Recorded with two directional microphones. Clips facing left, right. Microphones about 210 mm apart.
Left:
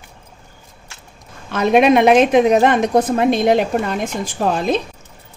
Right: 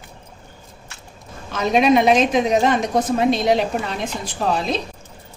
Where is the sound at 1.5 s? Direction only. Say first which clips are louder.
Left 3 dB; 60° left (ahead or behind).